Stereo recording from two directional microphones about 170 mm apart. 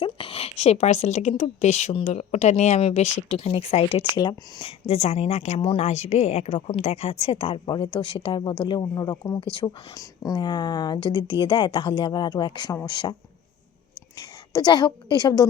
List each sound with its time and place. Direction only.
0.0 s a woman's voice: 30° left (ahead or behind)
4.9 s a woman's voice: 40° left (ahead or behind)
14.2 s a woman's voice: 25° left (ahead or behind)